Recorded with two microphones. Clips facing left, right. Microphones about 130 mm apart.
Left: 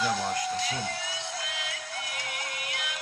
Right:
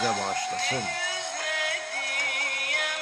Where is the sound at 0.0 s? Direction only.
50° right (ahead or behind).